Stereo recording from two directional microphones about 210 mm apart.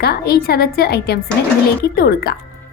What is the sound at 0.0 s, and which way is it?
Speech, 50° left (ahead or behind).